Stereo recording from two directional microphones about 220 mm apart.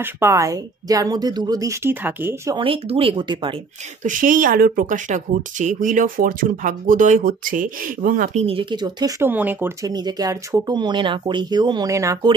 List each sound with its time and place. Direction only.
0.0 s a woman's voice: 10° right (ahead or behind)
2.6 s speech: 25° right (ahead or behind)
4.0 s speech: 35° right (ahead or behind); by 12.4 s 15° right (ahead or behind)